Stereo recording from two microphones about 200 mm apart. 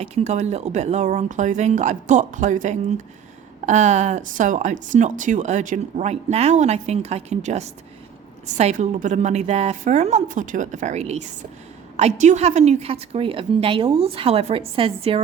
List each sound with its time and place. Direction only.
0.0 s a woman's voice: 30° right (ahead or behind)